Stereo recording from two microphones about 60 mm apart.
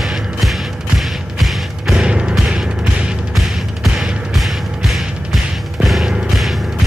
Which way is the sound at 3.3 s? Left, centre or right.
Centre.